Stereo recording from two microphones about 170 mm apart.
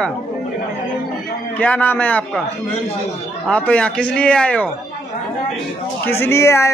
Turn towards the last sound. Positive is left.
turn(degrees=15)  # may be behind; listen again after turning